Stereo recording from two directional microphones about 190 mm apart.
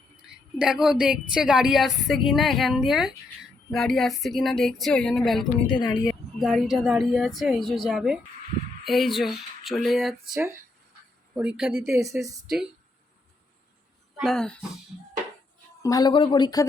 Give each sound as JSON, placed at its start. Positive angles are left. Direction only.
{"t": 0.2, "sound": "a woman's voice", "side_deg": -5}
{"t": 5.7, "sound": "speech", "side_deg": 20}
{"t": 6.1, "sound": "a woman's voice", "side_deg": 0}
{"t": 11.8, "sound": "speech", "side_deg": -15}
{"t": 14.2, "sound": "a woman's voice", "side_deg": 5}
{"t": 15.8, "sound": "speech", "side_deg": 20}